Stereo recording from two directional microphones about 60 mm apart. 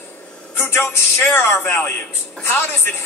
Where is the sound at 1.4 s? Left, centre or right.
Left.